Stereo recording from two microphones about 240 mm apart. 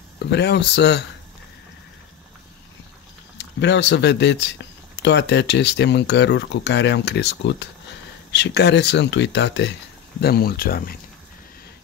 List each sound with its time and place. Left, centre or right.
0.2 s speech: left
3.3 s speech: left